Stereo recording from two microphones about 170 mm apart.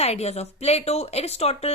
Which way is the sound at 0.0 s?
40° left (ahead or behind).